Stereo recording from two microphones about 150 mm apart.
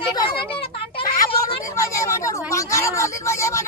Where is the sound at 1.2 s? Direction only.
20° left (ahead or behind).